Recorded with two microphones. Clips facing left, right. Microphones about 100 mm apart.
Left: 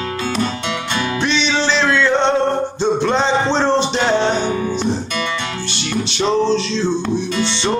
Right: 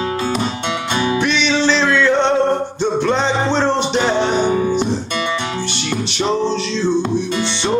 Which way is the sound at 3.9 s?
15° right (ahead or behind).